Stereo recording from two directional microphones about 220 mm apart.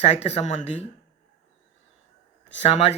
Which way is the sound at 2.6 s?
30° left (ahead or behind).